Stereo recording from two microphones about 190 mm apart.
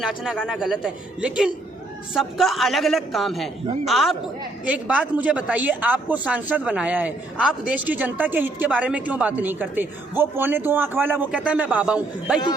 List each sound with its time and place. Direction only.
0.0 s a man's voice: 5° right (ahead or behind)